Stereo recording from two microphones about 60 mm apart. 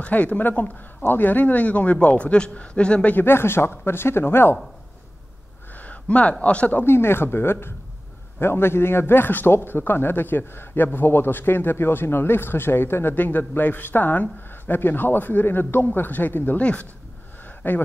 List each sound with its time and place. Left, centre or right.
0.0 s speech: left
3.3 s a man's voice: left
5.8 s a sound: left
6.4 s speech: left
6.9 s a man's voice: left
17.6 s a man's voice: left